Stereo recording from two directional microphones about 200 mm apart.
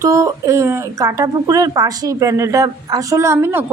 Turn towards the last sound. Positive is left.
turn(degrees=-10)  # may be behind; listen again after turning